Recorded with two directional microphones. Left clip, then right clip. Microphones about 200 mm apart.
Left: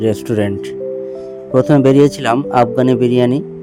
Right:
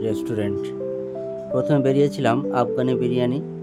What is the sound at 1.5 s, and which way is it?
A man's voice, 30° left (ahead or behind).